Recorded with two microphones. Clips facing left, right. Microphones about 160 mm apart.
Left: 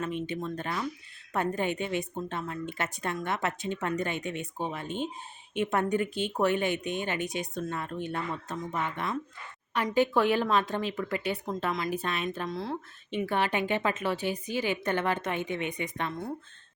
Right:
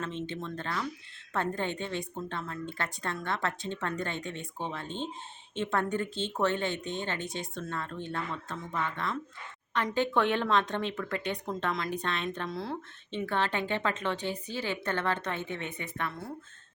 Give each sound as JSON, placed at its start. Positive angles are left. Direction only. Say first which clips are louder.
{"t": 0.0, "sound": "speech", "louder": "left 3 dB", "side_deg": 15}
{"t": 13.1, "sound": "speech", "louder": "left 2 dB", "side_deg": 10}